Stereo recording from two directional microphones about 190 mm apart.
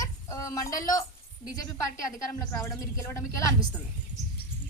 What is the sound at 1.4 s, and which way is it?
A woman's voice, 20° left (ahead or behind).